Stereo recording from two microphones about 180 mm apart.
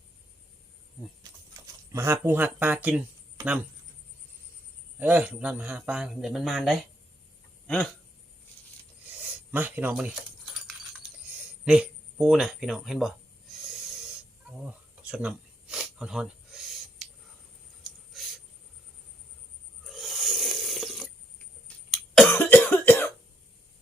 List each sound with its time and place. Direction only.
1.9 s speech: 15° right (ahead or behind)
4.9 s speech: 10° right (ahead or behind)
9.5 s keys jangling: 10° right (ahead or behind)
11.6 s speech: 5° right (ahead or behind)
15.0 s a sound: 5° right (ahead or behind)
18.1 s writing: centre (ahead or behind)
19.8 s a sound: centre (ahead or behind)
21.8 s cough: centre (ahead or behind)